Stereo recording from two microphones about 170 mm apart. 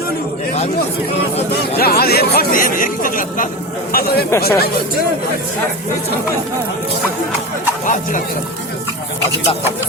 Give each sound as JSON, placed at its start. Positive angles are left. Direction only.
{"t": 1.5, "sound": "speech", "side_deg": 65}
{"t": 3.9, "sound": "speech", "side_deg": 65}